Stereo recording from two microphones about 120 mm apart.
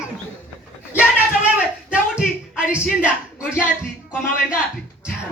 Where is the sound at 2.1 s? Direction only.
10° right (ahead or behind).